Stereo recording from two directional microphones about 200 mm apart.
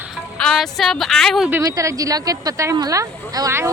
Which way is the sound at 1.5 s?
15° right (ahead or behind).